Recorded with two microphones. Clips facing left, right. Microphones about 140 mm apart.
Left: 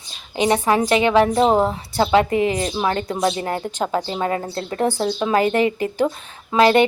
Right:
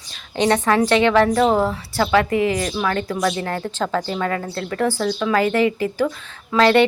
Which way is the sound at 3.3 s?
15° left (ahead or behind).